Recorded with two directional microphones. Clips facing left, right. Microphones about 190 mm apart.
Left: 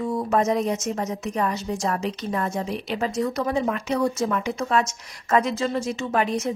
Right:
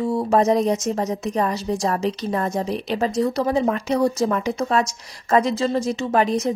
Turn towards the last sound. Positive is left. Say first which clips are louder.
# right 4 dB
turn(degrees=-35)  # may be behind; listen again after turning